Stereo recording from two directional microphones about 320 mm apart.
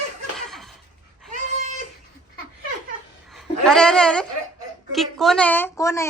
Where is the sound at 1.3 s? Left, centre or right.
Right.